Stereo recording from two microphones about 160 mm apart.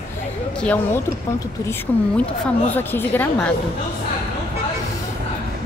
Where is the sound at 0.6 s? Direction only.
10° left (ahead or behind).